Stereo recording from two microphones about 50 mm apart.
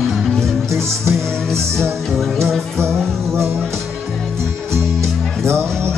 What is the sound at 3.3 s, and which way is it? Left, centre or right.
Music, right.